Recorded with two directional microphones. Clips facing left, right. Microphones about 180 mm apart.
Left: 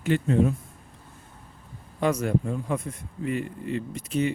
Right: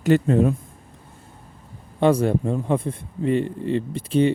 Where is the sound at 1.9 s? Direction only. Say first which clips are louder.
Right 6 dB; 30° right (ahead or behind).